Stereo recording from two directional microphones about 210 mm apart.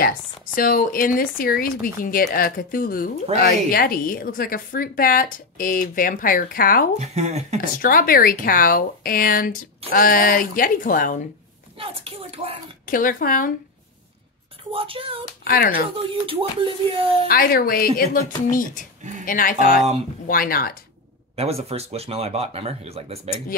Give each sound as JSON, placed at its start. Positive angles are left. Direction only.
{"t": 0.6, "sound": "a woman's voice", "side_deg": 40}
{"t": 7.0, "sound": "speech", "side_deg": -30}
{"t": 7.8, "sound": "a woman's voice", "side_deg": 40}
{"t": 11.8, "sound": "speech", "side_deg": -25}
{"t": 12.8, "sound": "speech", "side_deg": 40}
{"t": 14.7, "sound": "speech", "side_deg": -25}
{"t": 15.4, "sound": "a woman's voice", "side_deg": 45}
{"t": 16.0, "sound": "speech", "side_deg": -25}
{"t": 17.3, "sound": "a woman's voice", "side_deg": 45}
{"t": 21.4, "sound": "speech", "side_deg": -30}